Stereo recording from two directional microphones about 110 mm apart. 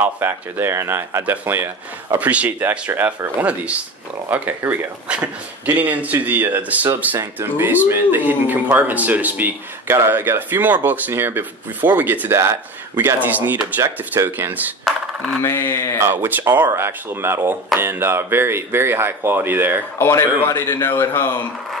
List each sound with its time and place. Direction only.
0.0 s speech: 20° right (ahead or behind)
15.4 s a man's voice: 20° left (ahead or behind)
16.0 s speech: 20° right (ahead or behind)
20.0 s a man's voice: 25° left (ahead or behind)